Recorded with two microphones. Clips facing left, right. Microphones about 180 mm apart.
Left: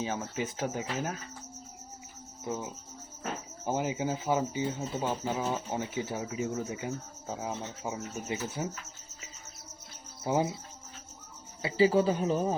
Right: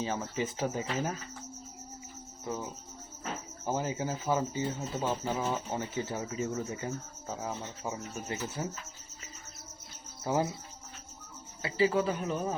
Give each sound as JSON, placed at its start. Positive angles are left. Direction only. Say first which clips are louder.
{"t": 0.0, "sound": "speech", "louder": "even", "side_deg": 5}
{"t": 3.7, "sound": "speech", "louder": "left 2 dB", "side_deg": 15}
{"t": 10.2, "sound": "speech", "louder": "left 1 dB", "side_deg": 15}
{"t": 11.6, "sound": "speech", "louder": "left 3 dB", "side_deg": 30}